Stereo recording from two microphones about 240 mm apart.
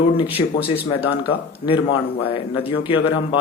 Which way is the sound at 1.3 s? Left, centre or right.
Left.